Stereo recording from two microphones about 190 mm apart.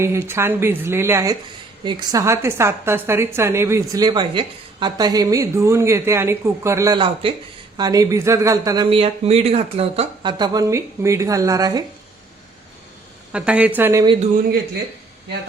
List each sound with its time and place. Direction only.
0.0 s a woman's voice: 15° right (ahead or behind)
13.3 s a woman's voice: 5° right (ahead or behind)